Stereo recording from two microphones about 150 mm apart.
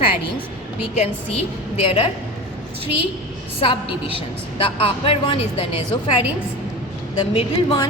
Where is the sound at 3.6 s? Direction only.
35° left (ahead or behind).